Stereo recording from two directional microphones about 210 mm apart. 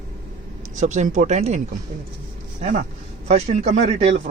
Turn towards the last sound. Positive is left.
turn(degrees=-30)  # may be behind; listen again after turning